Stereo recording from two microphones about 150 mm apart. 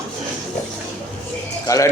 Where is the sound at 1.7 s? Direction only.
25° left (ahead or behind).